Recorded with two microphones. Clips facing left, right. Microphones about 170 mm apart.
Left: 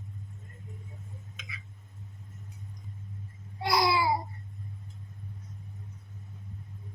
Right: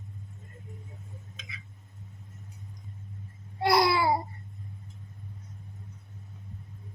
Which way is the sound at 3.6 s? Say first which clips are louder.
Right 3 dB; 60° right (ahead or behind).